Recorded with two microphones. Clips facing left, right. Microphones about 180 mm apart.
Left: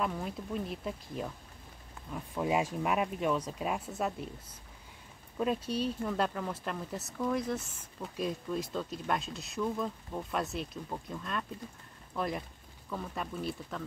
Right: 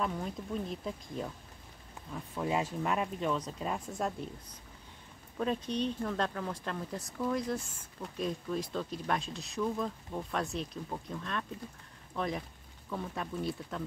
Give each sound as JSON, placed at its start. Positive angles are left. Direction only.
{"t": 0.0, "sound": "speech", "side_deg": 5}
{"t": 2.0, "sound": "a sound", "side_deg": -20}
{"t": 2.3, "sound": "speech", "side_deg": 10}